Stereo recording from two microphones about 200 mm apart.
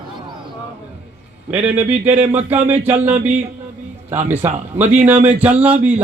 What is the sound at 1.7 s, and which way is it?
Speech, 10° right (ahead or behind).